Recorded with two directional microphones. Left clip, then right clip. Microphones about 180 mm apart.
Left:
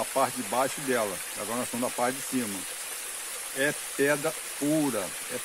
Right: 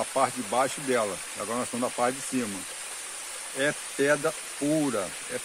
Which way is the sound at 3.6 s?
25° right (ahead or behind).